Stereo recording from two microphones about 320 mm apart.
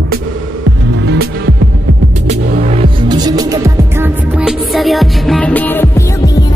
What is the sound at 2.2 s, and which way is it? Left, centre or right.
Music, centre.